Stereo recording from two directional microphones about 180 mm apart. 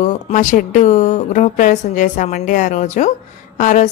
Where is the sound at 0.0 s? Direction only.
45° left (ahead or behind).